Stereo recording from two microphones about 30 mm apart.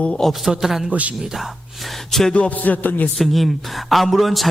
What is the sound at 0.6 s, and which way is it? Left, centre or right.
Speech, centre.